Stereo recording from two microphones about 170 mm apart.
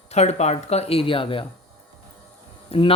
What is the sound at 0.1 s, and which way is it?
Speech, 40° left (ahead or behind).